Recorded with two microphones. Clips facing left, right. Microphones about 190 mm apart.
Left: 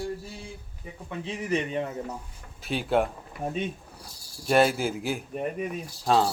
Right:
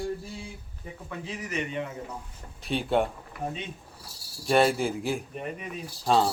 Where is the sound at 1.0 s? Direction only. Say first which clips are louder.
Left 5 dB; 25° left (ahead or behind).